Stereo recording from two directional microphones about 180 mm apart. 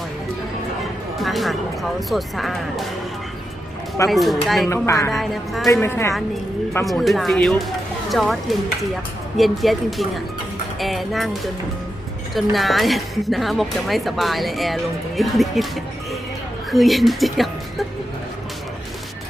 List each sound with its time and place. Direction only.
1.2 s a woman's voice: centre (ahead or behind)
4.1 s a woman's voice: centre (ahead or behind)
4.7 s a woman's voice: 15° left (ahead or behind)
5.1 s a woman's voice: centre (ahead or behind)
5.6 s a woman's voice: 15° left (ahead or behind)
6.8 s a woman's voice: centre (ahead or behind)
12.3 s a woman's voice: centre (ahead or behind)